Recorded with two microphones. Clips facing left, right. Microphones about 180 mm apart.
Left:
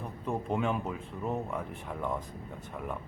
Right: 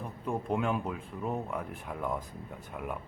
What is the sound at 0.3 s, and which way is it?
Speech, centre (ahead or behind).